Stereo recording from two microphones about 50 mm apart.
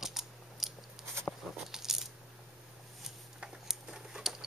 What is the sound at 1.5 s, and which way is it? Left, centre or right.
Coin, centre.